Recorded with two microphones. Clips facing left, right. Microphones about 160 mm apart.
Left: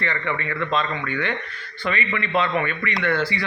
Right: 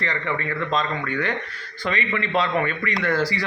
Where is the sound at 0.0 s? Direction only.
35° right (ahead or behind).